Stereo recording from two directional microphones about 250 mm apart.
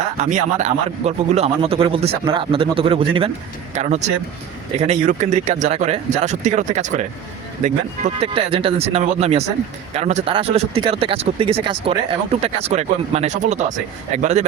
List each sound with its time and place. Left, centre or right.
0.0 s speech: right